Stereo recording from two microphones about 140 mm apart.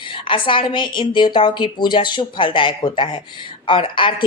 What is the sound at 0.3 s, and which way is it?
A woman's voice, 40° left (ahead or behind).